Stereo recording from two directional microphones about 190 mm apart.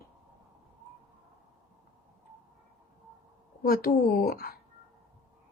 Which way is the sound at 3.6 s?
50° left (ahead or behind).